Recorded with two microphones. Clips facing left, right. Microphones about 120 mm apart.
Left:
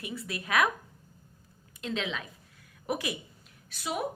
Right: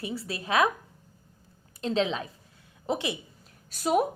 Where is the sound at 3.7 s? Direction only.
40° right (ahead or behind).